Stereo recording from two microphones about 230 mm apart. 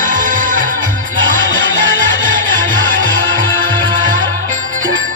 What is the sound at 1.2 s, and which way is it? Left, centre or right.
Music, right.